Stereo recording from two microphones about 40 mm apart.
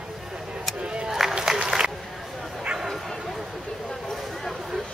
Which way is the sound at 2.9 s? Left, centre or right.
Centre.